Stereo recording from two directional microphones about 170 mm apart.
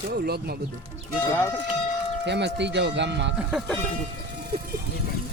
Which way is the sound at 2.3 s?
90° right.